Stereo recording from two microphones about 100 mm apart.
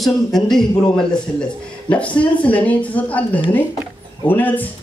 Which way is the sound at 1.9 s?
15° left (ahead or behind).